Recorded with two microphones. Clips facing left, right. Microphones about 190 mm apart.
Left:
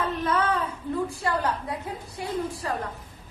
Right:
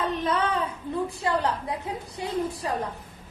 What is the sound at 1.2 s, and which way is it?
A woman's voice, 20° right (ahead or behind).